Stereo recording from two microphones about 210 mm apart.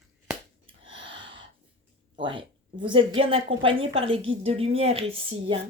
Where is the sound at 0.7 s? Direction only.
25° right (ahead or behind).